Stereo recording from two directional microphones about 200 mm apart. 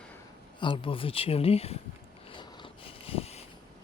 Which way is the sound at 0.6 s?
25° left (ahead or behind).